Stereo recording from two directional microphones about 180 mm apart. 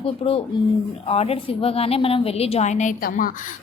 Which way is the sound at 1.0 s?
35° left (ahead or behind).